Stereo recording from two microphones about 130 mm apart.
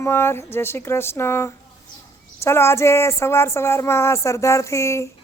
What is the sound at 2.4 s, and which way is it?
A man's voice, 20° left (ahead or behind).